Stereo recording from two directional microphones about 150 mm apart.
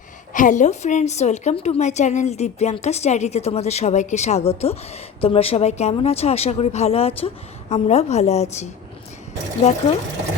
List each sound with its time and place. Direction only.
0.3 s a woman's voice: 55° left (ahead or behind)